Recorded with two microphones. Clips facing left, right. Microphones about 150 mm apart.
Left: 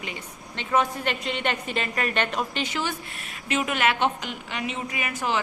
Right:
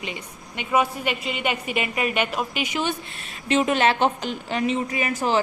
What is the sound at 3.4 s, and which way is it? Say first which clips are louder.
A woman's voice: right 5 dB; 30° right (ahead or behind).